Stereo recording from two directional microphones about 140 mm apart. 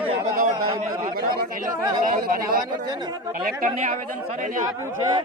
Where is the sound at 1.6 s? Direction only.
75° right (ahead or behind).